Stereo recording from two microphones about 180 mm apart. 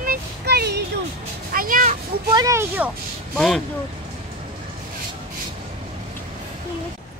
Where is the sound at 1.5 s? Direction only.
50° right (ahead or behind).